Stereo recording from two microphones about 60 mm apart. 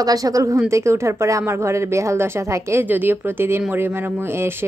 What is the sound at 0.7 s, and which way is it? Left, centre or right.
Speech, right.